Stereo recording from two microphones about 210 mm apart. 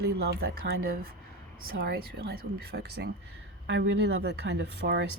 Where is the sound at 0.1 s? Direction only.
50° right (ahead or behind).